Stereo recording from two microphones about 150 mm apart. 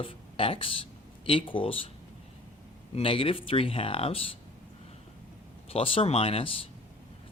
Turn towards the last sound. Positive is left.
turn(degrees=40)  # may be behind; listen again after turning